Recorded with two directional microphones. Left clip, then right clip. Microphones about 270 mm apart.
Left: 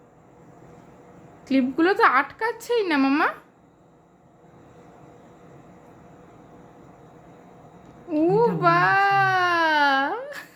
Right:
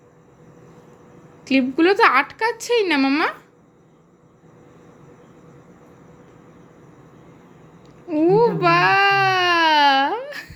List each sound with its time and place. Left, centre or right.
1.5 s speech: centre
8.0 s baby cry: centre